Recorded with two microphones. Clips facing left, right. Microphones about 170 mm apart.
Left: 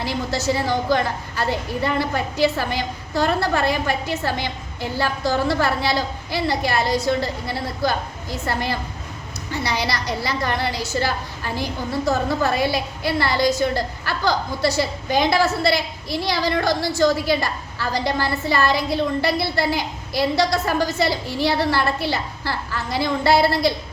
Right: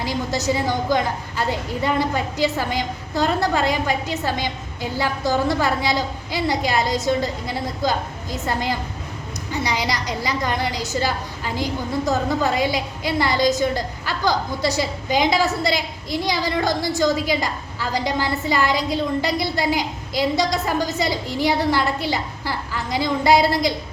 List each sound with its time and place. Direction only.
0.0 s a woman's voice: 15° right (ahead or behind)